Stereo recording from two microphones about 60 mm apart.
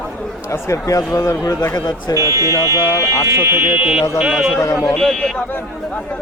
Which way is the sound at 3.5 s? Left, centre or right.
Right.